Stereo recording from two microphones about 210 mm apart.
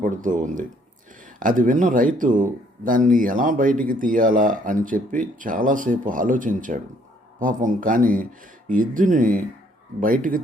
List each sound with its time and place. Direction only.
0.0 s speech: 40° right (ahead or behind)